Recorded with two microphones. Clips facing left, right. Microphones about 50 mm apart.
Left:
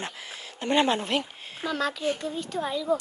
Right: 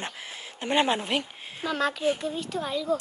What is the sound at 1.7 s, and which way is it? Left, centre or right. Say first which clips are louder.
Speech: right 2 dB; right.